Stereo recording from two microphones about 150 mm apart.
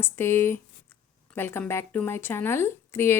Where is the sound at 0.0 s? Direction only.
15° left (ahead or behind).